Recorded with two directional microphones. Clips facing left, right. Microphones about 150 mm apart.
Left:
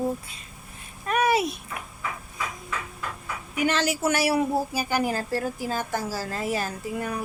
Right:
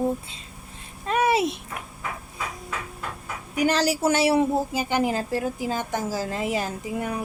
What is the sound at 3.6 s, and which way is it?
A woman's voice, 40° right (ahead or behind).